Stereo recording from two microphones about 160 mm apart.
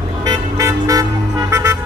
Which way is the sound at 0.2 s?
20° right (ahead or behind).